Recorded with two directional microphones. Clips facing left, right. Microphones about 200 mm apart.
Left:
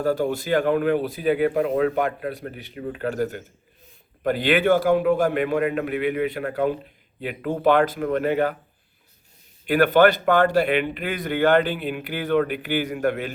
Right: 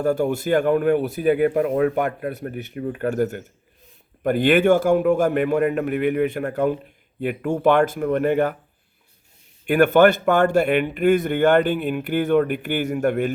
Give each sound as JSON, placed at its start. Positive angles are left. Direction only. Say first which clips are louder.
{"t": 0.3, "sound": "a man's voice", "louder": "right 2 dB", "side_deg": -45}
{"t": 9.6, "sound": "a man's voice", "louder": "right 2 dB", "side_deg": -45}